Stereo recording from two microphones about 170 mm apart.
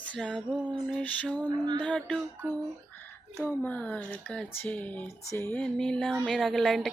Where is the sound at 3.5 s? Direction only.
10° left (ahead or behind).